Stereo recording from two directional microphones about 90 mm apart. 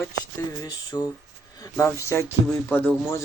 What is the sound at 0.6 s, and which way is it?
Speech, 45° left (ahead or behind).